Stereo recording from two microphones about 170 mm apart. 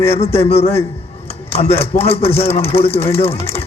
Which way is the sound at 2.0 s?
35° left (ahead or behind).